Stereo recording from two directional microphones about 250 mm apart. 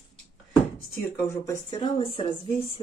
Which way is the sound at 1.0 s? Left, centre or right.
Centre.